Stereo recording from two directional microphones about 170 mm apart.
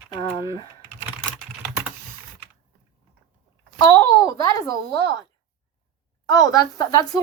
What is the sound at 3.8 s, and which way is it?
Speech, 20° left (ahead or behind).